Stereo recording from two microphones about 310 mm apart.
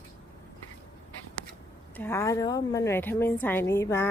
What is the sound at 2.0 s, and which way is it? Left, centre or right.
A woman's voice, centre.